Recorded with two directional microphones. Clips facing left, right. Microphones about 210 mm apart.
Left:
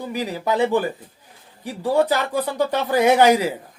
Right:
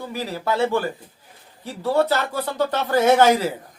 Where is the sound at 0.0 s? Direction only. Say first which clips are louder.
Left 2 dB; 15° left (ahead or behind).